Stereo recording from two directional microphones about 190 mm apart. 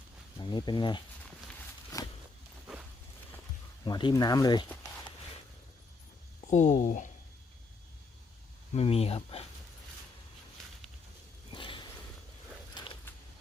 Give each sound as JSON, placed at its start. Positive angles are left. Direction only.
{"t": 0.3, "sound": "speech", "side_deg": 25}
{"t": 1.9, "sound": "a sound", "side_deg": 20}
{"t": 3.8, "sound": "speech", "side_deg": 25}
{"t": 6.5, "sound": "speech", "side_deg": 40}
{"t": 8.7, "sound": "speech", "side_deg": 30}
{"t": 11.5, "sound": "a sound", "side_deg": 25}